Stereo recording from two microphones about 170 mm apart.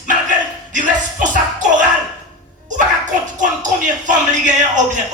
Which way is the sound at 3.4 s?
45° right (ahead or behind).